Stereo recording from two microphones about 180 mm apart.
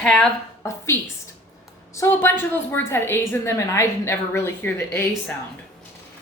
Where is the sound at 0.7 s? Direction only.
15° left (ahead or behind).